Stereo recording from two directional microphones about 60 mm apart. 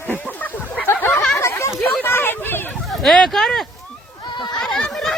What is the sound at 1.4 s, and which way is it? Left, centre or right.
Chatter, left.